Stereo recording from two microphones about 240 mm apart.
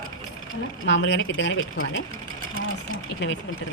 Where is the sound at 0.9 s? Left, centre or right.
Left.